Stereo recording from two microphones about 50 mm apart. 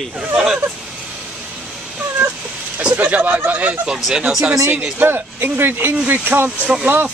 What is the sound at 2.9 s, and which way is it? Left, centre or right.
Speech, right.